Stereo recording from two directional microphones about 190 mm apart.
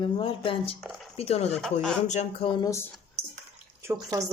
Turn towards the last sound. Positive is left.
turn(degrees=-15)  # may be behind; listen again after turning